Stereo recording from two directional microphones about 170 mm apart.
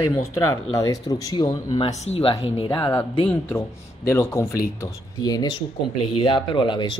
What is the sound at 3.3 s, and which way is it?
Speech, 15° left (ahead or behind).